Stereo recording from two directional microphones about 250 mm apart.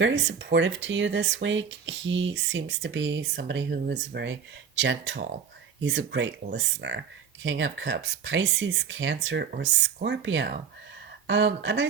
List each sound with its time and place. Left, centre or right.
0.0 s speech: right